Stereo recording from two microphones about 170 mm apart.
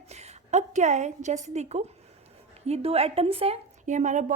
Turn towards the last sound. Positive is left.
turn(degrees=-45)  # may be behind; listen again after turning